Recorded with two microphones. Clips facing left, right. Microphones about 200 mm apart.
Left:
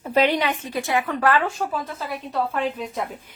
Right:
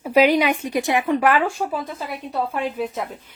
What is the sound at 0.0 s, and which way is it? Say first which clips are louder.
A woman's voice: right 4 dB; 10° right (ahead or behind).